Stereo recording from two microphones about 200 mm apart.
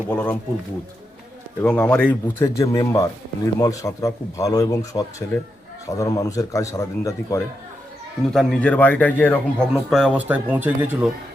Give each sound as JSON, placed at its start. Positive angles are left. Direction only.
{"t": 0.1, "sound": "speech", "side_deg": 5}
{"t": 1.6, "sound": "speech", "side_deg": 5}
{"t": 8.3, "sound": "speech", "side_deg": 0}
{"t": 9.9, "sound": "speech", "side_deg": -5}